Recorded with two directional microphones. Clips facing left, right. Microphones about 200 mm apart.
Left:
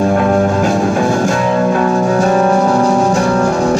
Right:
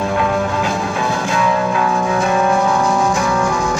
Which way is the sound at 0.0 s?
45° left (ahead or behind).